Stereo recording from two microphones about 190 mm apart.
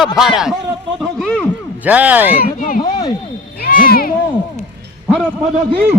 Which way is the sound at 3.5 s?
50° left (ahead or behind).